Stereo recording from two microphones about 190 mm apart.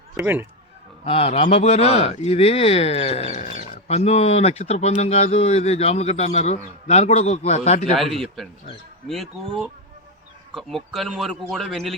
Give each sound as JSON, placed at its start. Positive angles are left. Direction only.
{"t": 0.2, "sound": "speech", "side_deg": -10}
{"t": 1.0, "sound": "speech", "side_deg": 30}
{"t": 7.9, "sound": "a man's voice", "side_deg": 0}